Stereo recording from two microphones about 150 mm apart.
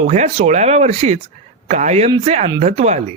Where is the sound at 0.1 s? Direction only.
50° right (ahead or behind).